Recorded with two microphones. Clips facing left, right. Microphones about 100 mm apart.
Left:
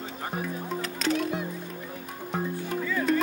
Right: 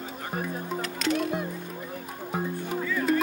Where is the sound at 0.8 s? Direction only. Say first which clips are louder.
Even; 35° left (ahead or behind).